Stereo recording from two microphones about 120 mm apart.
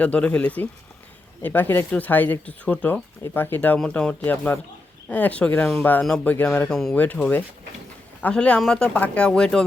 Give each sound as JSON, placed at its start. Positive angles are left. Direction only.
{"t": 0.0, "sound": "speech", "side_deg": 10}